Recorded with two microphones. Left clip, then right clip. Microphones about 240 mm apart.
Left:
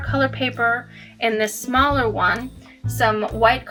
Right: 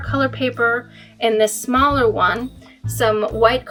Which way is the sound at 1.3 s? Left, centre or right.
Right.